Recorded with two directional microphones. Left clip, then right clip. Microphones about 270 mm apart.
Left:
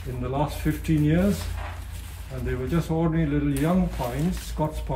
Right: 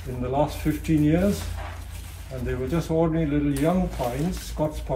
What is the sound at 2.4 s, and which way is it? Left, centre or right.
Speech, centre.